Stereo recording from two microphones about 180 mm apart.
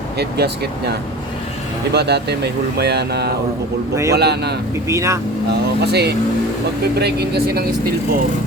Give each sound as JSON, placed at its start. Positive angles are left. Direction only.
{"t": 0.2, "sound": "speech", "side_deg": -65}
{"t": 4.9, "sound": "speech", "side_deg": -15}
{"t": 5.5, "sound": "speech", "side_deg": -65}